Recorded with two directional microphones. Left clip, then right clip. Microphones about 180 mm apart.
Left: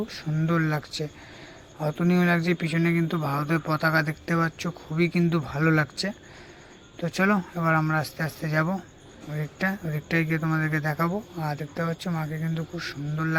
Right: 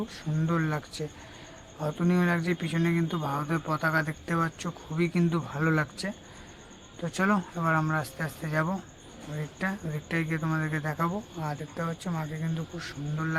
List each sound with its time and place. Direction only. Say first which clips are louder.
0.1 s speech: left 3 dB; 15° left (ahead or behind)